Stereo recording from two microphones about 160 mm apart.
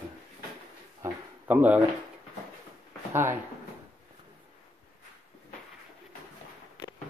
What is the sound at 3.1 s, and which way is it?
Speech, 15° right (ahead or behind).